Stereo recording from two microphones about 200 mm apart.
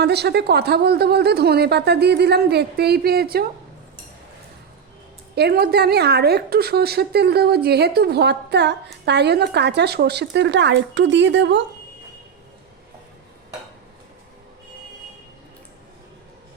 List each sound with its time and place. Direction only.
0.0 s speech: 55° right (ahead or behind)
5.3 s a woman's voice: 55° right (ahead or behind)